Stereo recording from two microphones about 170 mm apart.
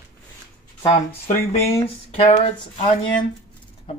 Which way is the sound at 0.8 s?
30° left (ahead or behind).